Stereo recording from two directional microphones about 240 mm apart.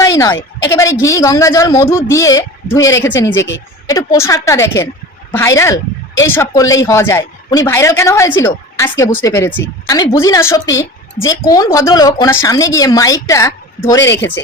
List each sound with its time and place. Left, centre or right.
0.0 s a sound: centre
1.0 s speech: centre
3.2 s speech: left
3.8 s speech: centre